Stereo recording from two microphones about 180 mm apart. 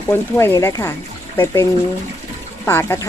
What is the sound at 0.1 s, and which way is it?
Speech, 15° left (ahead or behind).